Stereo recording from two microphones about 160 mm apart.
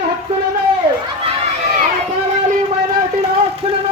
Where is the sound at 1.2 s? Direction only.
40° right (ahead or behind).